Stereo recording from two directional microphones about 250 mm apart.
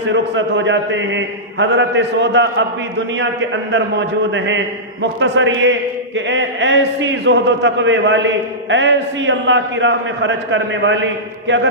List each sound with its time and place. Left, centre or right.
0.1 s a man's voice: right